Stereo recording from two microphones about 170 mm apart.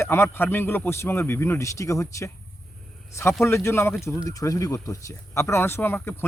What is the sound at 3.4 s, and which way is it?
A man's voice, 15° left (ahead or behind).